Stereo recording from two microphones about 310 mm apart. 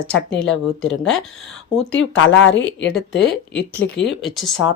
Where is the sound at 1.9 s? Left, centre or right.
Left.